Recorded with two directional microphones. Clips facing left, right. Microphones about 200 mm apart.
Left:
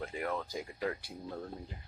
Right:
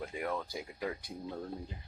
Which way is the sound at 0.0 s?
10° right (ahead or behind).